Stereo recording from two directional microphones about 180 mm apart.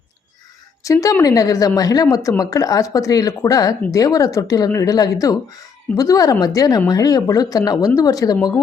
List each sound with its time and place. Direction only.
0.9 s speech: 20° left (ahead or behind)